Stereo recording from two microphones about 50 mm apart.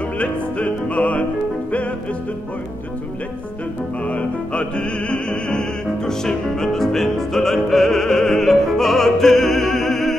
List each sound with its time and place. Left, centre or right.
0.2 s music: left
4.0 s opera: left; by 10.1 s centre